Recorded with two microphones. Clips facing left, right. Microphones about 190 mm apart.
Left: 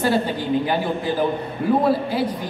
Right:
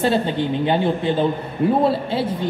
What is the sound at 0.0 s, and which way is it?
Speech, 25° right (ahead or behind).